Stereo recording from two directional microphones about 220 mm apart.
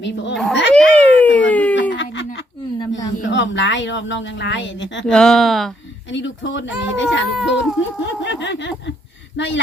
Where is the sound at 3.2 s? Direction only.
55° left (ahead or behind).